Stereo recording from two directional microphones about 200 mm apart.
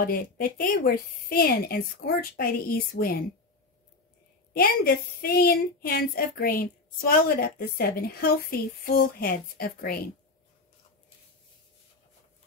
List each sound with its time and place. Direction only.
0.0 s a woman's voice: 45° left (ahead or behind)
4.6 s a woman's voice: 50° left (ahead or behind)